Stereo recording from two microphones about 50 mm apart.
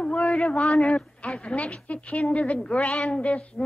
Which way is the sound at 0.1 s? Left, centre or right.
Left.